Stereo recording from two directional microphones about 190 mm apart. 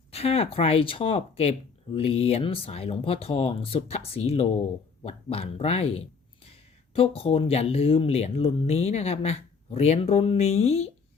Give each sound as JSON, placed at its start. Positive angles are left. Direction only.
{"t": 0.1, "sound": "speech", "side_deg": 30}